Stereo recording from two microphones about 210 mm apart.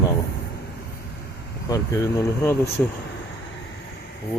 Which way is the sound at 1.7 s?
15° left (ahead or behind).